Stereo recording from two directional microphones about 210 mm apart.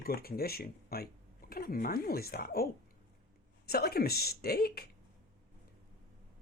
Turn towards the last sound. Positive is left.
turn(degrees=45)  # may be behind; listen again after turning